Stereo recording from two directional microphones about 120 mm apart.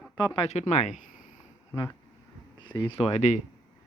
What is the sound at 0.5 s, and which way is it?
Speech, 70° left (ahead or behind).